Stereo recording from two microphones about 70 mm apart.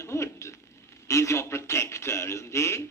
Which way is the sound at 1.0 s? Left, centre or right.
Left.